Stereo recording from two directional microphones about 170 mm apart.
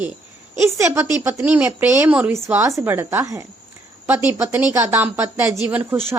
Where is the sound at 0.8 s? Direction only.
15° right (ahead or behind).